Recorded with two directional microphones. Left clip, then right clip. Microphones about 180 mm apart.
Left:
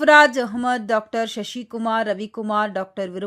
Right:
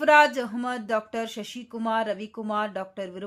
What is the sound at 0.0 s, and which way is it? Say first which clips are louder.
Speech: left 5 dB; 30° left (ahead or behind).